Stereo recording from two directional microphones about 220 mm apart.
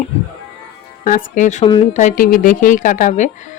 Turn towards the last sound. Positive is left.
turn(degrees=35)  # may be behind; listen again after turning